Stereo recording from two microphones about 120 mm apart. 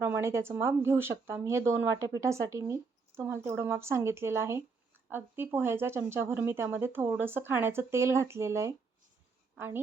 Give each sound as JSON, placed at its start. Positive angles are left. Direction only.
{"t": 0.0, "sound": "speech", "side_deg": -20}